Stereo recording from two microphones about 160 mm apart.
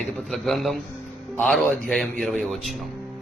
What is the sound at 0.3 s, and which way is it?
A man's voice, centre (ahead or behind).